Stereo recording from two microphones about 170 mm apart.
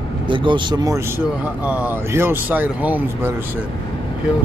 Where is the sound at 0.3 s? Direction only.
30° right (ahead or behind).